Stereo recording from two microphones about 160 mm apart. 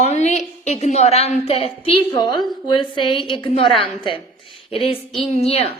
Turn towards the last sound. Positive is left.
turn(degrees=40)  # may be behind; listen again after turning